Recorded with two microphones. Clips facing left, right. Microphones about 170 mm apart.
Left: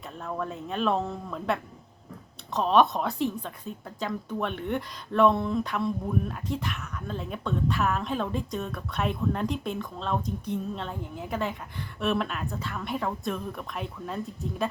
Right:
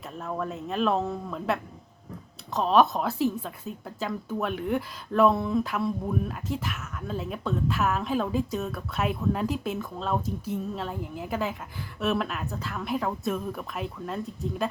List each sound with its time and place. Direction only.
0.2 s speech: centre (ahead or behind)